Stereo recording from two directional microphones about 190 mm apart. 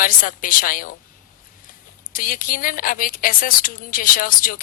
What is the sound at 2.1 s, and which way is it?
Speech, 45° left (ahead or behind).